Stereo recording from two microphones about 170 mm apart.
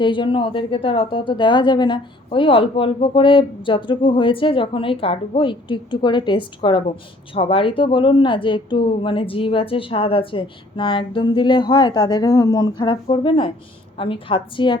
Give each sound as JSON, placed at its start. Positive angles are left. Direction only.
{"t": 0.0, "sound": "a woman's voice", "side_deg": 30}